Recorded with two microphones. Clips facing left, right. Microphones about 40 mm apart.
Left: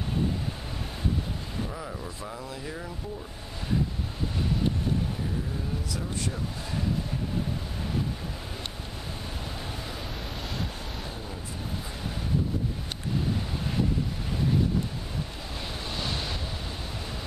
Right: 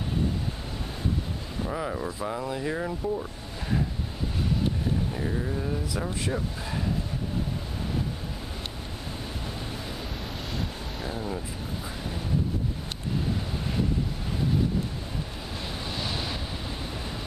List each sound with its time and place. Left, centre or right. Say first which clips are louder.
1.7 s speech: right 6 dB; right
11.0 s vehicle: right 5 dB; centre
15.9 s waves: even; centre